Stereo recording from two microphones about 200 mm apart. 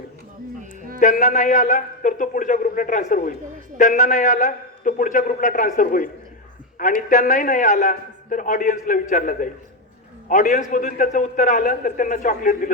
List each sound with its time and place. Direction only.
0.9 s a man's voice: 40° left (ahead or behind)
7.1 s a man's voice: 40° left (ahead or behind)